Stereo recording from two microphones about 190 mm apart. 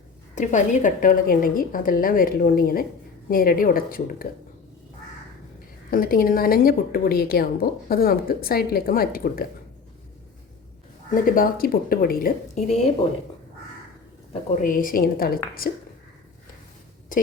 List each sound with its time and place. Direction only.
0.3 s a woman's voice: 40° left (ahead or behind)
5.9 s a woman's voice: 50° left (ahead or behind)
11.1 s a woman's voice: 50° left (ahead or behind)
12.5 s a woman's voice: 35° left (ahead or behind)
14.5 s a woman's voice: 45° left (ahead or behind)
17.1 s a sound: 45° left (ahead or behind)